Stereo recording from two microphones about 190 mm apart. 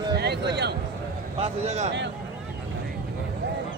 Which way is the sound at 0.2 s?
60° right (ahead or behind).